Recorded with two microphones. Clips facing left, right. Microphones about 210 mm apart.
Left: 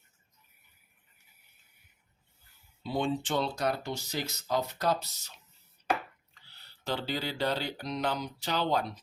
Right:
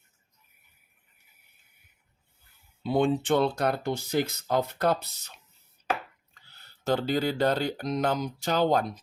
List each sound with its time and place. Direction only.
2.8 s speech: 55° right (ahead or behind)
6.3 s speech: 45° right (ahead or behind)